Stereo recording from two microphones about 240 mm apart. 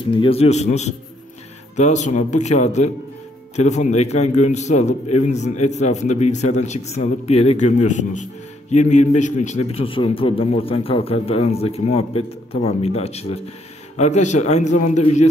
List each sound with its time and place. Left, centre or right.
0.0 s a man's voice: left